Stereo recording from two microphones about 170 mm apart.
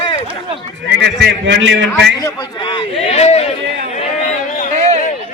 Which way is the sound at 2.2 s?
25° left (ahead or behind).